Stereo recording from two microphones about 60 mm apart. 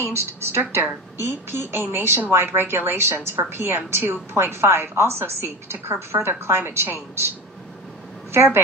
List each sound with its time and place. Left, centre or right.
0.1 s a woman's voice: right
8.3 s a woman's voice: right